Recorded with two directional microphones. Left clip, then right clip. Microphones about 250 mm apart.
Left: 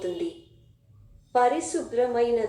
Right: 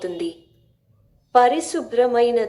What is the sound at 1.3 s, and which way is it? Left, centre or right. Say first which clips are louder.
A woman's voice: right 7 dB; right.